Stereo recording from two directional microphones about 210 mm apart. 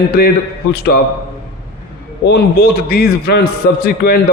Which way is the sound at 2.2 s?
45° left (ahead or behind).